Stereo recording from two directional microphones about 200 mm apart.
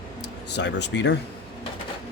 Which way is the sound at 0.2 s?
60° left (ahead or behind).